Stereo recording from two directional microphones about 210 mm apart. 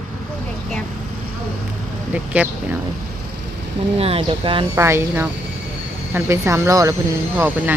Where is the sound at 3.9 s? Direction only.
30° right (ahead or behind).